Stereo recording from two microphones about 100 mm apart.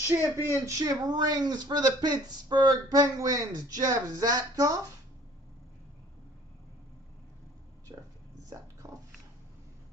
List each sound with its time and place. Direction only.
0.4 s speech: 25° right (ahead or behind)
7.9 s a sound: 40° right (ahead or behind)
8.5 s speech: 35° right (ahead or behind)